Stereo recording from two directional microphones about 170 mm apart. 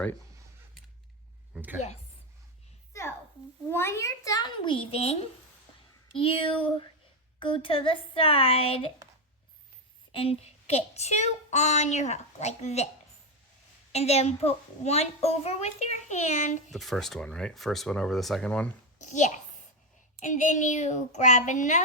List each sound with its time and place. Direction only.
1.5 s a woman's voice: 10° right (ahead or behind)
3.7 s a child's voice: 15° left (ahead or behind); by 8.9 s 35° left (ahead or behind)
10.1 s a child's voice: 35° left (ahead or behind)
13.9 s a child's voice: 40° left (ahead or behind)
16.7 s speech: centre (ahead or behind)
18.9 s a child's voice: 45° left (ahead or behind)